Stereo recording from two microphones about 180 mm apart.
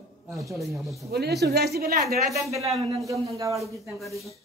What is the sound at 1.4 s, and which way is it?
Speech, 65° right (ahead or behind).